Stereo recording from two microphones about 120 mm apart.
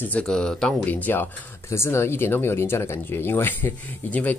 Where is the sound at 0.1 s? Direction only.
5° left (ahead or behind).